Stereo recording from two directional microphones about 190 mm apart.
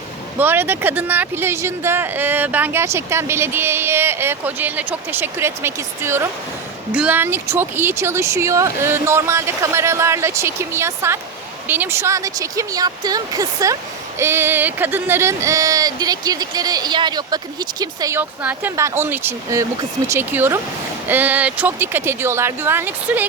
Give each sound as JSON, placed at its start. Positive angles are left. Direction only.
{"t": 0.3, "sound": "speech", "side_deg": -10}